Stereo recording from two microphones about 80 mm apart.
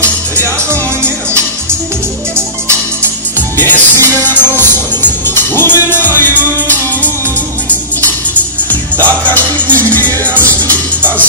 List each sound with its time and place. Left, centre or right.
3.5 s music: left
8.6 s music: left